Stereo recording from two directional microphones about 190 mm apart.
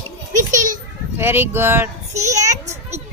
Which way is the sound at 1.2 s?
10° right (ahead or behind).